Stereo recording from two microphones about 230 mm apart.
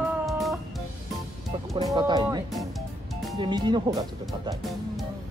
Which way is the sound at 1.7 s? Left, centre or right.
Centre.